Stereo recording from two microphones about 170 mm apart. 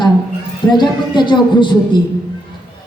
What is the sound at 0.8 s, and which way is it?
A woman's voice, 25° left (ahead or behind).